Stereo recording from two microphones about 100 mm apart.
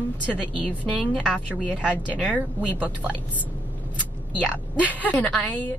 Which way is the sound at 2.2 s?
15° left (ahead or behind).